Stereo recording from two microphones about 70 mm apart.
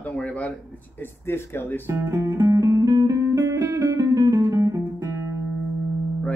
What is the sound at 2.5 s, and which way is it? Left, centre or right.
Music, right.